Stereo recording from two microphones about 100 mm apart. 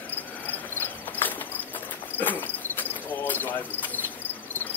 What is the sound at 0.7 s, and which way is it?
Cricket, 20° left (ahead or behind).